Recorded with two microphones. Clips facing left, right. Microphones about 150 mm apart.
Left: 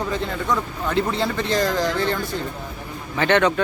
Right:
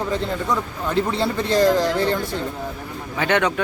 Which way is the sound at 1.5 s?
35° right (ahead or behind).